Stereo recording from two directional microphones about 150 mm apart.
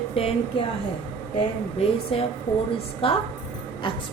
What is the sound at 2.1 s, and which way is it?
A woman's voice, 40° left (ahead or behind).